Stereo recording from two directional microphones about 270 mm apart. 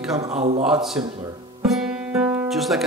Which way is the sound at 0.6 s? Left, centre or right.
Centre.